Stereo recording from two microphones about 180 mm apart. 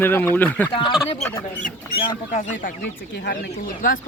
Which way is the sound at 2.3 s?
45° left (ahead or behind).